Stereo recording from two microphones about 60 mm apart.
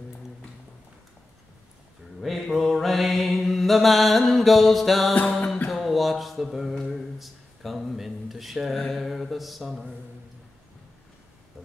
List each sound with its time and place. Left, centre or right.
2.2 s mantra: centre
5.1 s music: left
5.7 s a sound: centre